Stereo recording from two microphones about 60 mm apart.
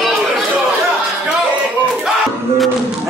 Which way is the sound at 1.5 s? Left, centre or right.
Right.